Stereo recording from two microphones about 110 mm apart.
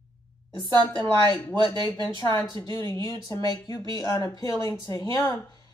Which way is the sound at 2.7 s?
30° left (ahead or behind).